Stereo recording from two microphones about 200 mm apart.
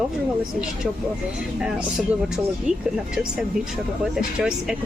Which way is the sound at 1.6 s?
5° right (ahead or behind).